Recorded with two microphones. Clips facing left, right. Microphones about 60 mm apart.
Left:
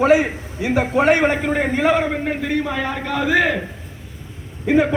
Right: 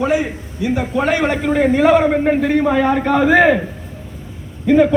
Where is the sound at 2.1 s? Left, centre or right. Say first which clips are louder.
Right 7 dB; centre.